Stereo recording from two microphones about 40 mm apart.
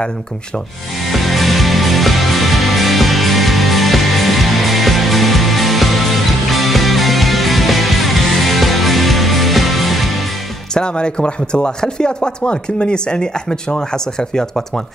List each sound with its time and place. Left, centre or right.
1.1 s music: centre
10.7 s speech: left